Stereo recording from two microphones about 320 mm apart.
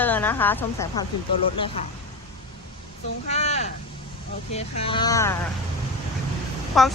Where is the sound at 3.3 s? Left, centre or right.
Left.